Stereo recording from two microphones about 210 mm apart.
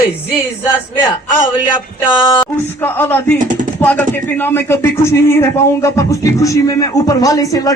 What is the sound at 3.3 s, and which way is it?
Speech, 35° right (ahead or behind).